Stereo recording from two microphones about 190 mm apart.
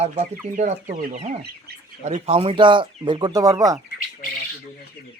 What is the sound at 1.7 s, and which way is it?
Bird, 55° right (ahead or behind).